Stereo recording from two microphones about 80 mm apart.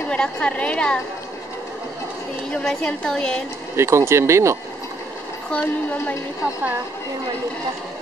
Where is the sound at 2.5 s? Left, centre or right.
Centre.